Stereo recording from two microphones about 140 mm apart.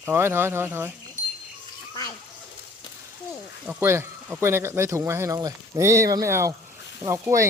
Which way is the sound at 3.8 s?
20° right (ahead or behind).